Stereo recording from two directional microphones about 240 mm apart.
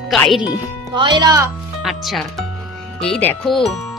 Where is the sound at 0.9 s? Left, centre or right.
Centre.